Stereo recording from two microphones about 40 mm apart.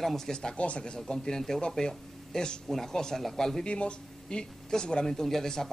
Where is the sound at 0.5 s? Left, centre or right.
Left.